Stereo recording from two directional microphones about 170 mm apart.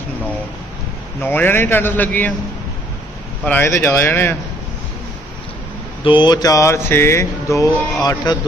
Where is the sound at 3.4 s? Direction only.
10° left (ahead or behind).